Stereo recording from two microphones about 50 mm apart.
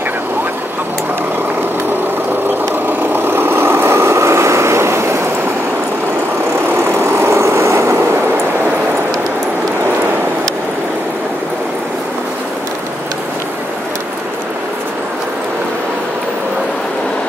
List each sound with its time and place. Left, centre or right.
2.4 s vehicle: right
6.8 s vehicle: right